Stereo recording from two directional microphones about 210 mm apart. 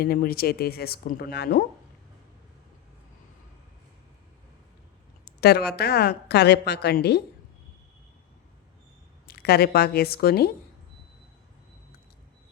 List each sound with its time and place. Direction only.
0.0 s a woman's voice: 45° left (ahead or behind)
5.2 s a woman's voice: 50° left (ahead or behind)
9.2 s a woman's voice: 50° left (ahead or behind)